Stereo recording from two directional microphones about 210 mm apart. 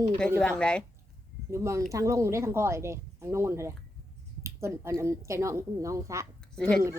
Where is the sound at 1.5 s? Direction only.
15° right (ahead or behind).